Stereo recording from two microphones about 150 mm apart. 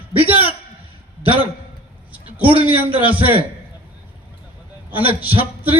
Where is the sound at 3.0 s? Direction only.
10° right (ahead or behind).